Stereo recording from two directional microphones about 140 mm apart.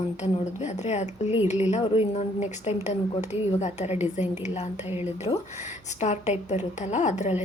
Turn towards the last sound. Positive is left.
turn(degrees=55)  # may be behind; listen again after turning